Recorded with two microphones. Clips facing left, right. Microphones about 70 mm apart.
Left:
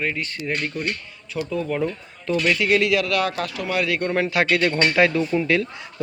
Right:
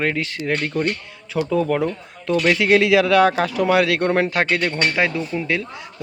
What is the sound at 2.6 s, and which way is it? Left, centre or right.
Speech, right.